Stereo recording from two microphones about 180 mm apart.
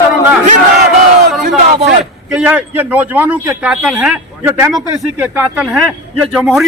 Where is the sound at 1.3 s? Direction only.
Centre (ahead or behind).